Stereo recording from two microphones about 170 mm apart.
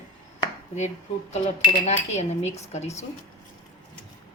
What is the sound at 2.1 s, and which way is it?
Speech, 40° left (ahead or behind).